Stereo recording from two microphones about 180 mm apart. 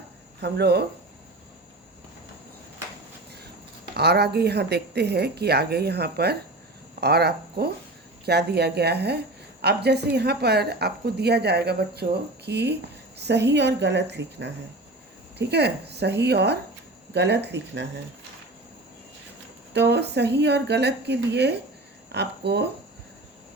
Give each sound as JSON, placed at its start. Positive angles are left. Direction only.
{"t": 0.4, "sound": "a woman's voice", "side_deg": -65}
{"t": 3.9, "sound": "a woman's voice", "side_deg": -65}
{"t": 19.7, "sound": "speech", "side_deg": -70}